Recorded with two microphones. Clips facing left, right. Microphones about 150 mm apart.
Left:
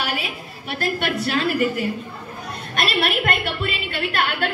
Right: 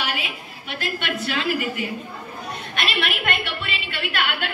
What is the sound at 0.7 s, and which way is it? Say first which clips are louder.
A woman's voice: left 4 dB; 45° left (ahead or behind).